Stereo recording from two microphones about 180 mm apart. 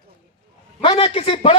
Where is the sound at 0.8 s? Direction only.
30° left (ahead or behind).